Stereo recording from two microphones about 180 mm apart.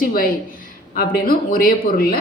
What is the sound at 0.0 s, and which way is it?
Speech, 55° left (ahead or behind).